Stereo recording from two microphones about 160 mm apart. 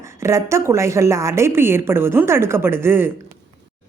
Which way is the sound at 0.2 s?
20° right (ahead or behind).